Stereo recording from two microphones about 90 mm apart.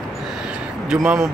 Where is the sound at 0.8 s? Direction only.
5° right (ahead or behind).